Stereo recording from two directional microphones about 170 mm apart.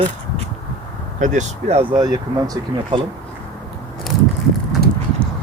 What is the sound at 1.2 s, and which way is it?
Speech, 45° right (ahead or behind).